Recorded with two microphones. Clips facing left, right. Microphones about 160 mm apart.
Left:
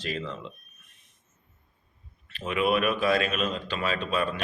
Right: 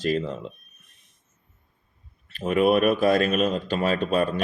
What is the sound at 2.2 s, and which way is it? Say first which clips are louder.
A man's voice: right 6 dB; 45° right (ahead or behind).